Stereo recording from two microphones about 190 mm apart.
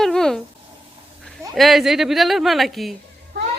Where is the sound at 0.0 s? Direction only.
Centre (ahead or behind).